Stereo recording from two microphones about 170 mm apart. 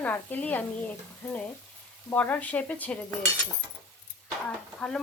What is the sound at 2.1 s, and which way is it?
Speech, 10° left (ahead or behind).